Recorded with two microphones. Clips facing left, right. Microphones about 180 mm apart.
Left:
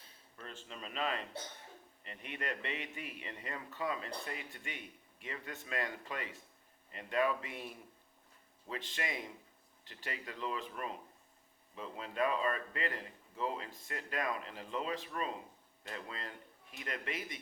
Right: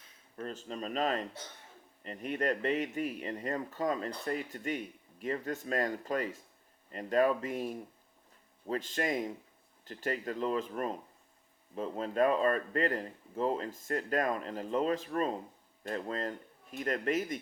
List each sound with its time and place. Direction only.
0.3 s speech: 40° right (ahead or behind)